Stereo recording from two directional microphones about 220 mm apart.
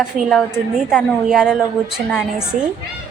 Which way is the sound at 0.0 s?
Centre (ahead or behind).